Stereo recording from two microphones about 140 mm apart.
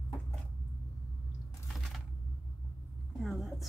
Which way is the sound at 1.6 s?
Centre (ahead or behind).